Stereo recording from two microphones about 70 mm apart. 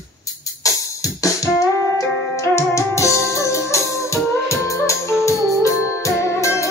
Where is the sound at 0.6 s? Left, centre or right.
Left.